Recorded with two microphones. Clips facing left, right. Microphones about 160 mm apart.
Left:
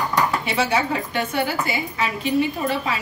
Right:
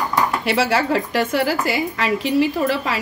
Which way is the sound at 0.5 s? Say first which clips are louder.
Right 3 dB; 85° right.